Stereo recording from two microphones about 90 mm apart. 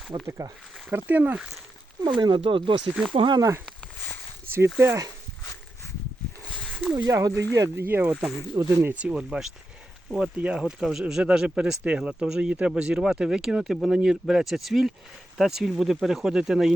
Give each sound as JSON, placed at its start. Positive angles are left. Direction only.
{"t": 0.1, "sound": "speech", "side_deg": -60}
{"t": 0.9, "sound": "speech", "side_deg": -20}
{"t": 2.0, "sound": "speech", "side_deg": -55}
{"t": 4.5, "sound": "speech", "side_deg": -25}
{"t": 7.0, "sound": "speech", "side_deg": -40}
{"t": 8.5, "sound": "speech", "side_deg": -20}